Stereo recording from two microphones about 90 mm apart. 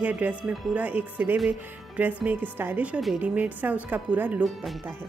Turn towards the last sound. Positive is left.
turn(degrees=-15)  # may be behind; listen again after turning